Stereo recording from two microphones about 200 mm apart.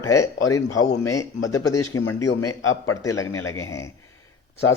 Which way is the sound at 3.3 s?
90° left.